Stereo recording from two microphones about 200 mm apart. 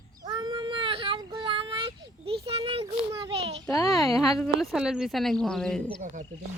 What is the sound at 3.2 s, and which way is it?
Speech, 30° right (ahead or behind).